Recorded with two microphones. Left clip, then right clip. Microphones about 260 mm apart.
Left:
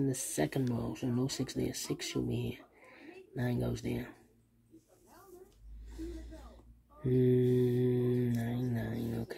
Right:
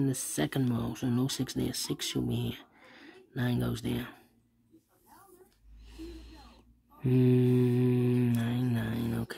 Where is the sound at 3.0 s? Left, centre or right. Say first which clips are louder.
Right 3 dB; centre.